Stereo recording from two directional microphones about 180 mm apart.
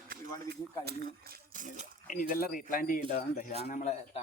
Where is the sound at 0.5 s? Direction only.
55° right (ahead or behind).